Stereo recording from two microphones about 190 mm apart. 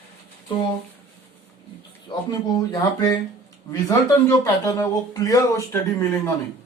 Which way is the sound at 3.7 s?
15° left (ahead or behind).